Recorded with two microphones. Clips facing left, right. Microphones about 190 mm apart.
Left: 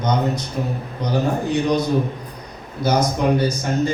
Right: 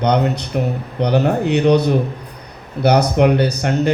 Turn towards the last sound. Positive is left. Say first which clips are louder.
# right 3 dB
turn(degrees=-65)  # may be behind; listen again after turning